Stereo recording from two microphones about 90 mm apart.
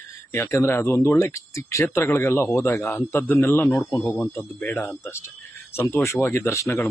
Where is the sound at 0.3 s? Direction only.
30° left (ahead or behind).